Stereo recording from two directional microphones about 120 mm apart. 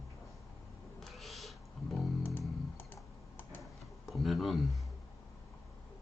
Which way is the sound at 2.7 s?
15° left (ahead or behind).